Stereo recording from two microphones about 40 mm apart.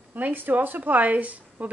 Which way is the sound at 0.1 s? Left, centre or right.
Right.